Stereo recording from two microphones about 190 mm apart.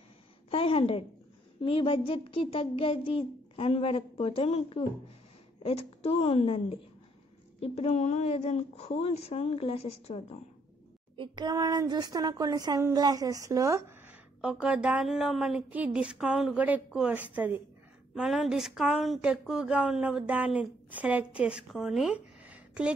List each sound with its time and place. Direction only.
0.5 s a sound: 30° left (ahead or behind)
1.6 s a woman's voice: 30° left (ahead or behind)
11.1 s a woman's voice: 20° right (ahead or behind); by 22.9 s 5° right (ahead or behind)